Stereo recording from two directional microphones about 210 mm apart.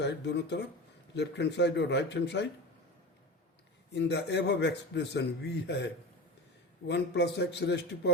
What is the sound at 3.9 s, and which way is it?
A man's voice, 55° left (ahead or behind).